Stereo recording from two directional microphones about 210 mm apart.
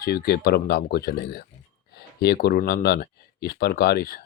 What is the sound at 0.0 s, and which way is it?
Speech, 45° left (ahead or behind).